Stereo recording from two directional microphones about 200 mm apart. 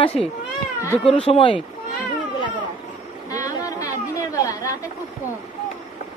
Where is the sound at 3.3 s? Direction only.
15° left (ahead or behind).